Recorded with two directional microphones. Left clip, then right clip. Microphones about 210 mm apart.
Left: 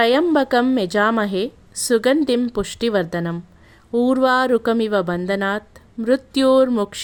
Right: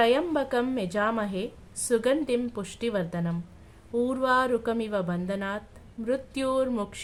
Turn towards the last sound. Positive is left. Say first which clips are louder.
# left 12 dB
turn(degrees=40)  # may be behind; listen again after turning